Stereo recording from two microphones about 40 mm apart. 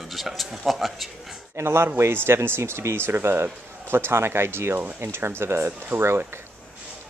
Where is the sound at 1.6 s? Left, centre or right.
Right.